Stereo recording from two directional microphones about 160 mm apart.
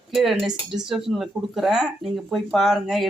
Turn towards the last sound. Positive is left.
turn(degrees=0)  # may be behind; listen again after turning